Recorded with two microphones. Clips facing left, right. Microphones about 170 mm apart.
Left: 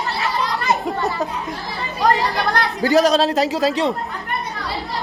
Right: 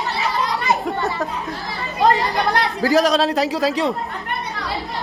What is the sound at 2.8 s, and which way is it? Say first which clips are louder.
Speech: left 2 dB; centre (ahead or behind).